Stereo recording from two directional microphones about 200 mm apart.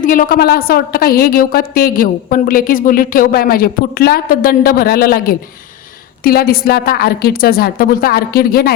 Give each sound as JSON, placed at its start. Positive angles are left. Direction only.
{"t": 0.0, "sound": "a woman's voice", "side_deg": 40}